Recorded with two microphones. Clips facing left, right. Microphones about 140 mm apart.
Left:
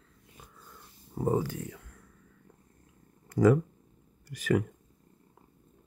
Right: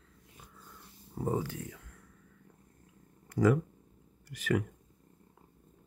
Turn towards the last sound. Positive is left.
turn(degrees=35)  # may be behind; listen again after turning